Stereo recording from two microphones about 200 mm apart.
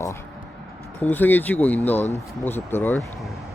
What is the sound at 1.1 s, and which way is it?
Speech, 10° left (ahead or behind).